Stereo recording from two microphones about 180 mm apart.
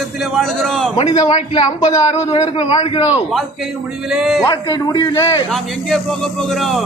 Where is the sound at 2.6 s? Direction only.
35° left (ahead or behind).